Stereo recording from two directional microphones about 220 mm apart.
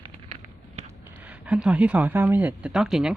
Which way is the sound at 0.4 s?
30° right (ahead or behind).